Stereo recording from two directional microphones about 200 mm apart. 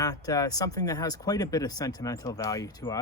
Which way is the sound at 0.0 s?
20° left (ahead or behind).